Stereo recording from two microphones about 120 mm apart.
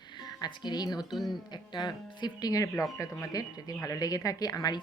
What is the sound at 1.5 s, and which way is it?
Speech, 40° left (ahead or behind).